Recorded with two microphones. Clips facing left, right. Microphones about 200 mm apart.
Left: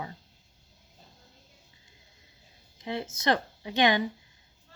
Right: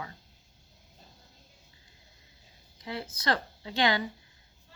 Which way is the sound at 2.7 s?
20° left (ahead or behind).